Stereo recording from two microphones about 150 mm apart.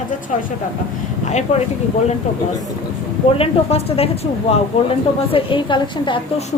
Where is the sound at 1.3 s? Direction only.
50° left (ahead or behind).